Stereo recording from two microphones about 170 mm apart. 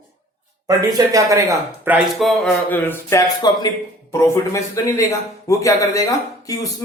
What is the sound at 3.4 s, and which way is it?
Speech, 25° left (ahead or behind).